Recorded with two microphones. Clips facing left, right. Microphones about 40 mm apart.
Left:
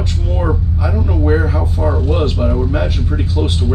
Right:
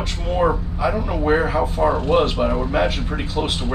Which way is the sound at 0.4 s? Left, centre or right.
Right.